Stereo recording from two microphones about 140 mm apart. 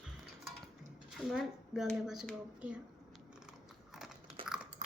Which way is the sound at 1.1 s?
Centre (ahead or behind).